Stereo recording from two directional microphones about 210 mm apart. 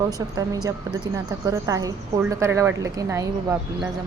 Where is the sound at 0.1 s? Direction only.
15° right (ahead or behind).